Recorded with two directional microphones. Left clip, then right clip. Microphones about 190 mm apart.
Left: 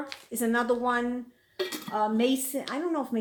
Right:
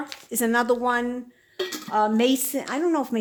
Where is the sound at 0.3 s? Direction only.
40° right (ahead or behind).